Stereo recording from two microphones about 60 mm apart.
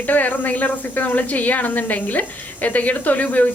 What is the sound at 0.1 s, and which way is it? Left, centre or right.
A woman's voice, left.